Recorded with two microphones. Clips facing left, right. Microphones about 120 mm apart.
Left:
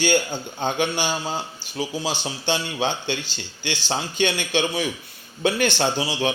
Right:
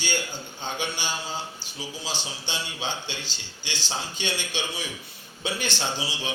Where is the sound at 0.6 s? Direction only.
60° left (ahead or behind).